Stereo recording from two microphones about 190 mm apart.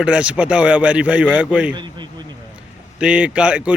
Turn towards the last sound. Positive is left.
turn(degrees=-5)  # may be behind; listen again after turning